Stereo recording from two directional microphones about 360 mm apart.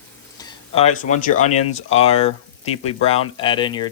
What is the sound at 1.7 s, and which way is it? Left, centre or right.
Frying, centre.